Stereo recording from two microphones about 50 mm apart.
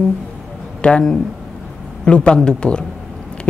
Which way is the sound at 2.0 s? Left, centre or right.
Centre.